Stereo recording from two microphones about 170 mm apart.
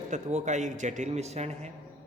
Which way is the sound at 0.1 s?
45° right (ahead or behind).